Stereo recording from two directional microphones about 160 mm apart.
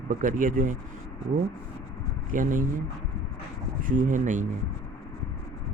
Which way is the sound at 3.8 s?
55° right (ahead or behind).